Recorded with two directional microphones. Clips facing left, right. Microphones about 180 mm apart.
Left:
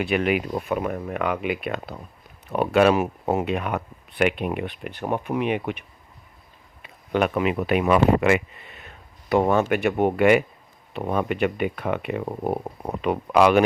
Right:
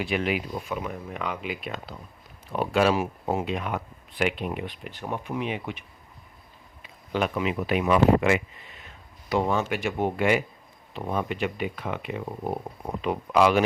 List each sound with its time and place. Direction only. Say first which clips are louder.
0.0 s speech: left 5 dB; 60° left (ahead or behind)
6.8 s speech: left 5 dB; 60° left (ahead or behind)